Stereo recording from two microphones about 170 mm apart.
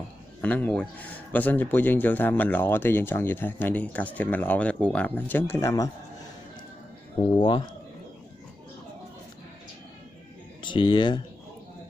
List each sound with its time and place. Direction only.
0.4 s a man's voice: 10° left (ahead or behind)
7.2 s speech: 30° left (ahead or behind)
10.6 s speech: 30° left (ahead or behind)